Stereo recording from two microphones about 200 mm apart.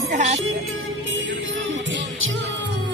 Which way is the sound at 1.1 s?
75° right (ahead or behind).